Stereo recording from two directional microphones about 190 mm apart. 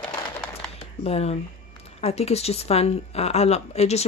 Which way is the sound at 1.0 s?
35° left (ahead or behind).